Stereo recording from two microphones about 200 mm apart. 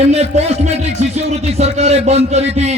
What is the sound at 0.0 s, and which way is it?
Speech, 30° right (ahead or behind).